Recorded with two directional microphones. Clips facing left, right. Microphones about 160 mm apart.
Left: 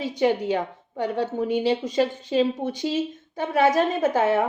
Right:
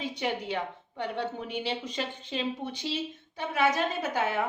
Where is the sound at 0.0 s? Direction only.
40° left (ahead or behind).